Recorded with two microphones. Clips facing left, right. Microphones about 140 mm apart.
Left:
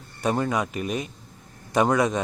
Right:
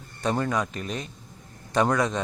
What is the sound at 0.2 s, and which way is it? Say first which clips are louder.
A man's voice: left 2 dB; 5° left (ahead or behind).